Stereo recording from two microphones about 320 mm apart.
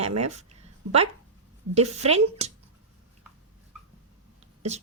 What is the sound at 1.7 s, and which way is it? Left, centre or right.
Speech, centre.